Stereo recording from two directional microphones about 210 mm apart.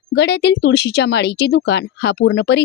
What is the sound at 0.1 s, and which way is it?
Speech, 55° left (ahead or behind).